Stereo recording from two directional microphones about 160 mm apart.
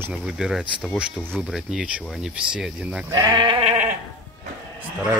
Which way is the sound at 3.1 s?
20° right (ahead or behind).